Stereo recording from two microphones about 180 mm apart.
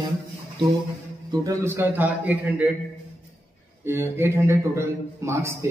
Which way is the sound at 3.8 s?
15° right (ahead or behind).